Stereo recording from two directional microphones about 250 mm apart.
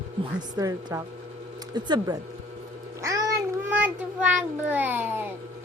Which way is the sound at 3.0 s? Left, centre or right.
Centre.